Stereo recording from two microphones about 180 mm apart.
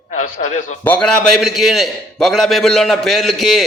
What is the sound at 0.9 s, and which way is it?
A man's voice, 5° left (ahead or behind).